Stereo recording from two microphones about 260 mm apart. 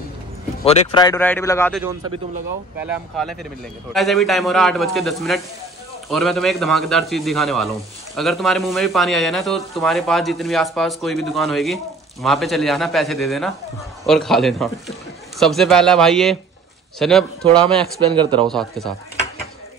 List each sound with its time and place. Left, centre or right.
0.7 s speech: centre
1.8 s a man's voice: centre
18.1 s speech: centre
18.5 s speech: centre